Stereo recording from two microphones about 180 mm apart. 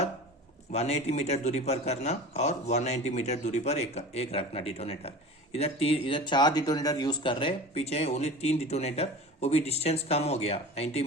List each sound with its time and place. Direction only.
0.7 s speech: 35° left (ahead or behind)